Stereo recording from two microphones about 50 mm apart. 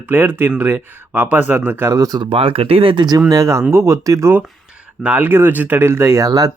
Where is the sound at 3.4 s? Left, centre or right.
Right.